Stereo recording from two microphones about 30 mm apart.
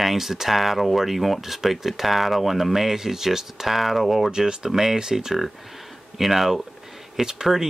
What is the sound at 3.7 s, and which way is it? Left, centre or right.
Speech, centre.